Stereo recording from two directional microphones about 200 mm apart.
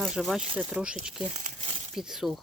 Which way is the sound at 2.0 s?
Centre (ahead or behind).